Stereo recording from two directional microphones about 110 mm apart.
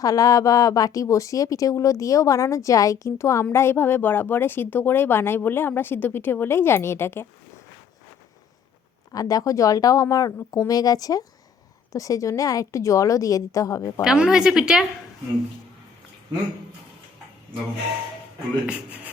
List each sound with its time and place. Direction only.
0.0 s speech: 35° left (ahead or behind)
9.1 s speech: 35° left (ahead or behind)
14.0 s a woman's voice: 5° right (ahead or behind)
18.6 s speech: 10° right (ahead or behind)